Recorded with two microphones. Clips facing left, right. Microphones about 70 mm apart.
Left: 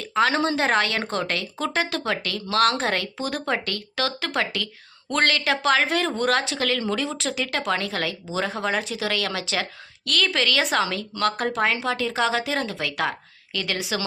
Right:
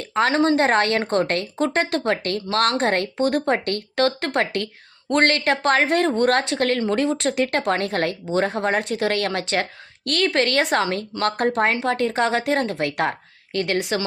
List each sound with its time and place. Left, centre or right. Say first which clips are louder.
0.1 s a woman's voice: right 3 dB; right